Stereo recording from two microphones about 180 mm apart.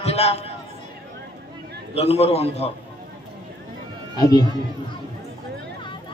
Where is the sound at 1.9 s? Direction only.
35° left (ahead or behind).